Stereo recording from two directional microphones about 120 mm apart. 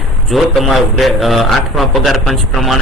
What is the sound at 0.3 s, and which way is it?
Speech, centre (ahead or behind).